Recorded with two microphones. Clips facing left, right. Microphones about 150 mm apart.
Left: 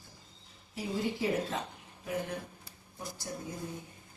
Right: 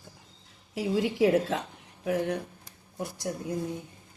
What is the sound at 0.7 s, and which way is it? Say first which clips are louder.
Speech: right 7 dB; 90° right.